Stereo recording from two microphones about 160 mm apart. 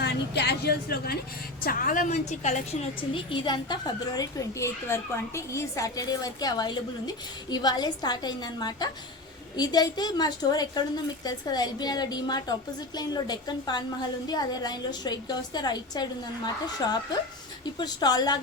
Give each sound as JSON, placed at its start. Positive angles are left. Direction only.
{"t": 0.0, "sound": "a woman's voice", "side_deg": 90}
{"t": 1.6, "sound": "a woman's voice", "side_deg": 60}
{"t": 3.1, "sound": "a woman's voice", "side_deg": 30}